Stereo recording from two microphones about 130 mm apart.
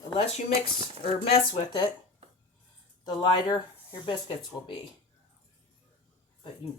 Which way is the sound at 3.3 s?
35° left (ahead or behind).